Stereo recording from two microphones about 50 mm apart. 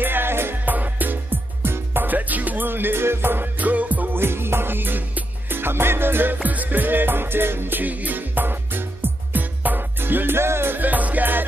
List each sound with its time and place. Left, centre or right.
0.0 s music: right
0.7 s music: right
3.6 s music: right
4.1 s music: right
6.4 s music: right
10.8 s music: right